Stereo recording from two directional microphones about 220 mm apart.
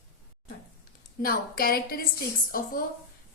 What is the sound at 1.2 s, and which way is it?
Speech, 40° left (ahead or behind).